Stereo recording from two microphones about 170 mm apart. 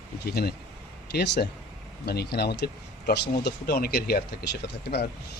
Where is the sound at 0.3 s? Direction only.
65° left (ahead or behind).